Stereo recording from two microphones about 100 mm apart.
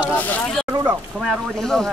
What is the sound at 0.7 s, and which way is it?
Speech, 35° right (ahead or behind).